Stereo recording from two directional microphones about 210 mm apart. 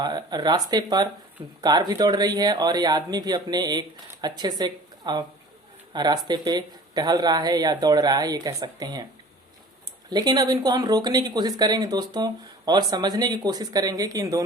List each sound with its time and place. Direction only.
0.0 s speech: 20° right (ahead or behind)
10.1 s speech: 20° right (ahead or behind)